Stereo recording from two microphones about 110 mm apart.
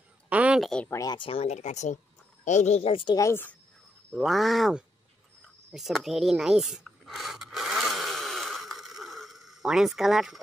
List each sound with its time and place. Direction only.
0.3 s a sound: 15° right (ahead or behind)
0.6 s speech: 5° left (ahead or behind)
0.8 s a woman's voice: 30° left (ahead or behind)
1.1 s speech: 50° left (ahead or behind)
1.4 s speech: 90° left
2.9 s speech: 50° left (ahead or behind)
3.2 s a woman's voice: 25° left (ahead or behind)
4.1 s speech: centre (ahead or behind)
5.4 s a sound: 5° right (ahead or behind)